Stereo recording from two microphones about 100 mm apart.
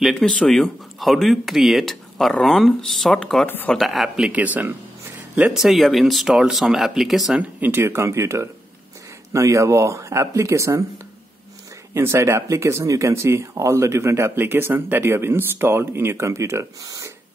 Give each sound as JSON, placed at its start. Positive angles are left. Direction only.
{"t": 0.0, "sound": "speech", "side_deg": 5}
{"t": 3.4, "sound": "speech", "side_deg": 20}
{"t": 3.7, "sound": "speech", "side_deg": 0}
{"t": 4.3, "sound": "speech", "side_deg": -15}
{"t": 5.3, "sound": "speech", "side_deg": -5}
{"t": 7.3, "sound": "speech", "side_deg": -20}
{"t": 11.9, "sound": "speech", "side_deg": -25}